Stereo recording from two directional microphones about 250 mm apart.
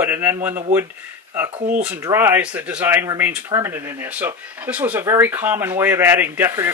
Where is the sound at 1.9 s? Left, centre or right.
Centre.